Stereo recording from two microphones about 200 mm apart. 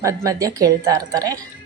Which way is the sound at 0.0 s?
15° right (ahead or behind).